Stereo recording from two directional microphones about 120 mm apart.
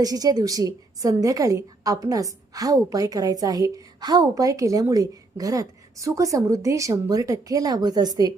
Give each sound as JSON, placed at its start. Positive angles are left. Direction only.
{"t": 0.0, "sound": "a woman's voice", "side_deg": -30}